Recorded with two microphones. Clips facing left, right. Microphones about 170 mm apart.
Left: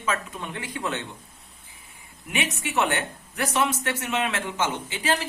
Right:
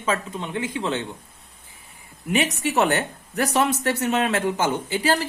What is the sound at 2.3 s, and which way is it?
Speech, 35° right (ahead or behind).